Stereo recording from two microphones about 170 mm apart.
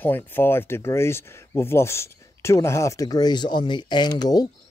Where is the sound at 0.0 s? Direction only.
10° left (ahead or behind).